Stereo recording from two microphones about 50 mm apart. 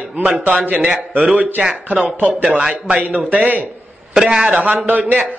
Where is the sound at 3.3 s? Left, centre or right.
Right.